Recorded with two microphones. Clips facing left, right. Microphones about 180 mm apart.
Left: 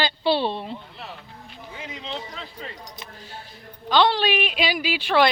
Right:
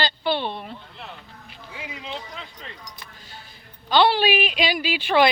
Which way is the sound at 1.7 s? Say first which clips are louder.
Left 1 dB; 10° right (ahead or behind).